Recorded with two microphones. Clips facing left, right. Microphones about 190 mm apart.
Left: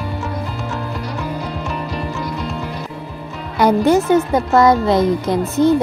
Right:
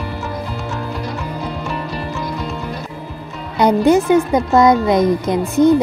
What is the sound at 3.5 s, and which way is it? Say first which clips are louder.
Speech: right 1 dB; 20° right (ahead or behind).